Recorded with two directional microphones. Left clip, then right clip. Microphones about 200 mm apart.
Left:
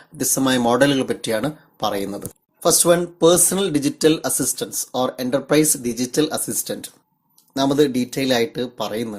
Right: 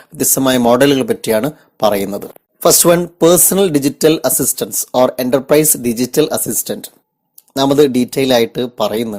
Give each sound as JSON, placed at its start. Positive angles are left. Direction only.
{"t": 0.2, "sound": "speech", "side_deg": -35}